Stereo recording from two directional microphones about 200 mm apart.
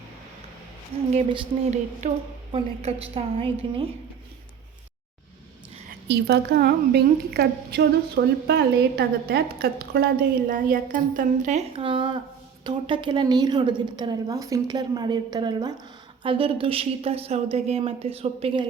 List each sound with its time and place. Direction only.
0.9 s a woman's voice: 30° right (ahead or behind)
2.5 s a woman's voice: 30° right (ahead or behind)
6.1 s a woman's voice: 55° right (ahead or behind); by 18.6 s 30° right (ahead or behind)